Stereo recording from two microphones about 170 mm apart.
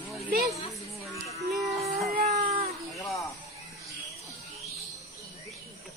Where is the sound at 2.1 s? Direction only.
45° right (ahead or behind).